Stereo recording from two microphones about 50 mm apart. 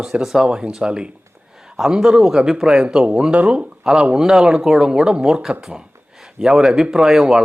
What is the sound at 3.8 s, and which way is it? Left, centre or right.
A man's voice, centre.